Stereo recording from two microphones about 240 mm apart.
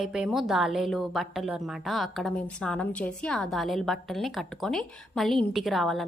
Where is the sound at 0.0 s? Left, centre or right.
Centre.